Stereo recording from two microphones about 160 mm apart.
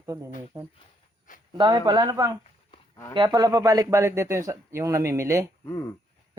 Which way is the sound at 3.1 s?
25° right (ahead or behind).